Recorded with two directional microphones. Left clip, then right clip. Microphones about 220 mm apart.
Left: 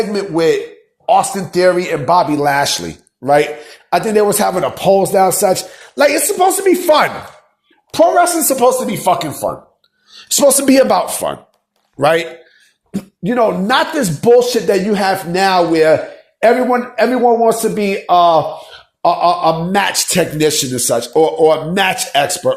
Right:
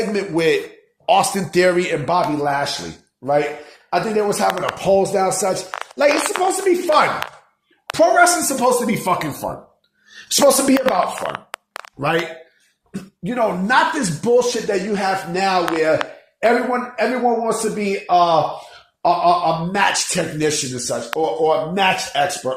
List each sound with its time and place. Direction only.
0.1 s speech: 15° left (ahead or behind)
1.0 s speech: centre (ahead or behind)
2.4 s speech: 45° left (ahead or behind)
3.8 s speech: 40° left (ahead or behind)
7.9 s speech: 25° left (ahead or behind)
10.4 s speech: 40° left (ahead or behind)
11.9 s speech: 50° left (ahead or behind)
12.9 s speech: 40° left (ahead or behind)